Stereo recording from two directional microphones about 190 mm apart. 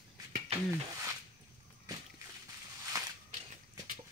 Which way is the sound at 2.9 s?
20° right (ahead or behind).